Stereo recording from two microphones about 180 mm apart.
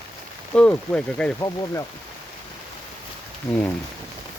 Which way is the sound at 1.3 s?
20° left (ahead or behind).